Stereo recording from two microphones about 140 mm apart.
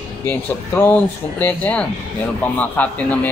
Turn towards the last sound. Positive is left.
turn(degrees=10)  # may be behind; listen again after turning